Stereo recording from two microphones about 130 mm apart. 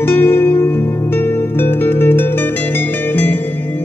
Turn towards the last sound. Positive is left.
turn(degrees=15)  # may be behind; listen again after turning